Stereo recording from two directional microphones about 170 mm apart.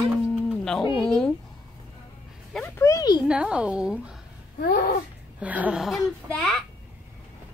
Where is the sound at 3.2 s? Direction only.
5° right (ahead or behind).